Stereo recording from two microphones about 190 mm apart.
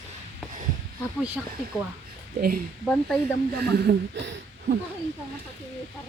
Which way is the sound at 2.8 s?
5° left (ahead or behind).